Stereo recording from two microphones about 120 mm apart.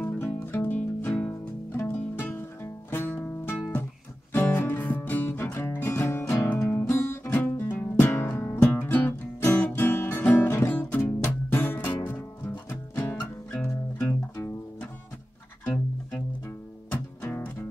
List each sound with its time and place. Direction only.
0.0 s music: 15° left (ahead or behind)
16.9 s music: 15° left (ahead or behind)